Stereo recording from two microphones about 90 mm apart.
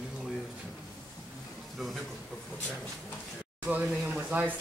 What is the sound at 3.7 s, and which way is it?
Speech, 20° right (ahead or behind).